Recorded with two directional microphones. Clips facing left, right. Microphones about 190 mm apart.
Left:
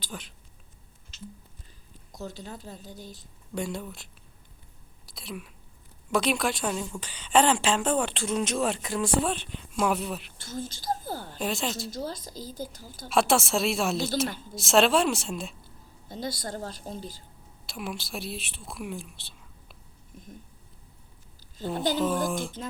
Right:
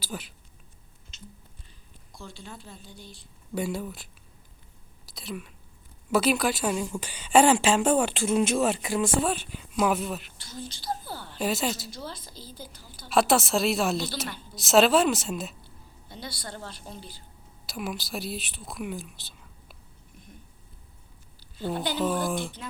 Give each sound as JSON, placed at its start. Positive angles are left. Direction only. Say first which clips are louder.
{"t": 0.0, "sound": "speech", "louder": "right 3 dB", "side_deg": -5}
{"t": 2.1, "sound": "a woman's voice", "louder": "left 5 dB", "side_deg": 40}
{"t": 3.5, "sound": "speech", "louder": "right 2 dB", "side_deg": -5}
{"t": 5.0, "sound": "whispering", "louder": "right 2 dB", "side_deg": 0}
{"t": 6.1, "sound": "a woman's voice", "louder": "right 2 dB", "side_deg": -5}
{"t": 10.3, "sound": "a woman's voice", "louder": "left 4 dB", "side_deg": 50}
{"t": 11.3, "sound": "speech", "louder": "right 4 dB", "side_deg": -5}
{"t": 11.9, "sound": "a woman's voice", "louder": "left 5 dB", "side_deg": 45}
{"t": 13.1, "sound": "speech", "louder": "right 1 dB", "side_deg": 0}
{"t": 16.0, "sound": "a woman's voice", "louder": "left 6 dB", "side_deg": 45}
{"t": 17.7, "sound": "speech", "louder": "right 2 dB", "side_deg": 0}
{"t": 21.9, "sound": "speech", "louder": "right 2 dB", "side_deg": 0}